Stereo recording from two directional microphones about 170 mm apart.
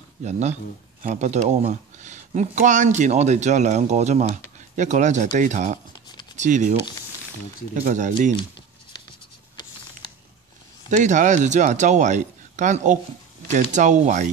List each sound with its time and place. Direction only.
0.2 s speech: 40° right (ahead or behind)
7.8 s speech: 45° right (ahead or behind)
10.9 s speech: 45° right (ahead or behind)